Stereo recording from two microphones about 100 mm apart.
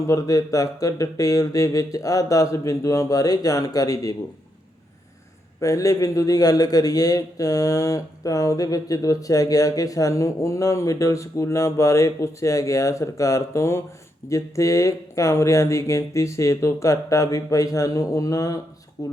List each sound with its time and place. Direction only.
0.1 s a man's voice: 35° left (ahead or behind)
5.5 s a man's voice: 30° left (ahead or behind)